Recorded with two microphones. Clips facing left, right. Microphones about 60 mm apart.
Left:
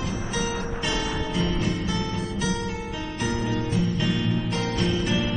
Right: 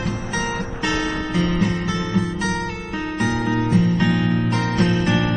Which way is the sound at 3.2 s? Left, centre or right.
Right.